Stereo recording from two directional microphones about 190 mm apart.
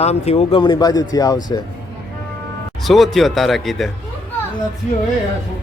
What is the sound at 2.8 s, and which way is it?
A man's voice, centre (ahead or behind).